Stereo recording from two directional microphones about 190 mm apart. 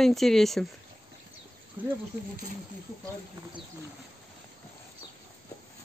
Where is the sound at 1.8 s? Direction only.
10° right (ahead or behind).